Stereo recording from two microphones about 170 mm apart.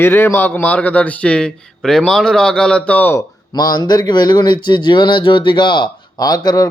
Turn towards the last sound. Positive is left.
turn(degrees=20)  # may be behind; listen again after turning